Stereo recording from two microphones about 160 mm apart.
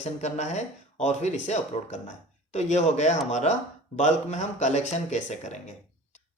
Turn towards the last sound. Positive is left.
turn(degrees=45)  # may be behind; listen again after turning